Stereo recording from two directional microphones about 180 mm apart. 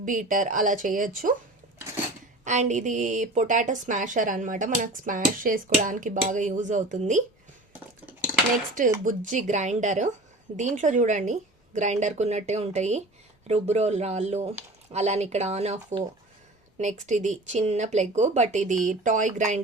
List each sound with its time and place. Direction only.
0.0 s a woman's voice: 45° right (ahead or behind)
2.4 s a woman's voice: 40° right (ahead or behind)
9.0 s a woman's voice: 40° right (ahead or behind)